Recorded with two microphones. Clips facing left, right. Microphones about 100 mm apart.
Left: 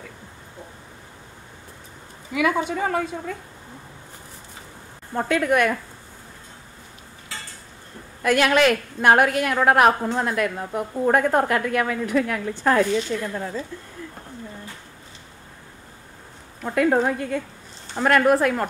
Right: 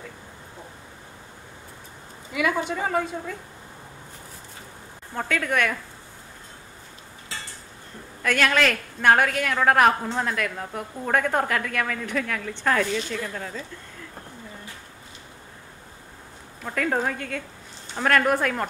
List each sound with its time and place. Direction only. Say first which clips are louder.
2.3 s a woman's voice: left 3 dB; centre (ahead or behind)
5.1 s a woman's voice: left 5 dB; 15° left (ahead or behind)
8.2 s a woman's voice: left 4 dB; 15° left (ahead or behind)
16.6 s a woman's voice: left 6 dB; 15° left (ahead or behind)